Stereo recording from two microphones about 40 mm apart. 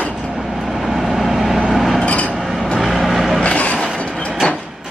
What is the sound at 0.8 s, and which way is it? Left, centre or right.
Vehicle, centre.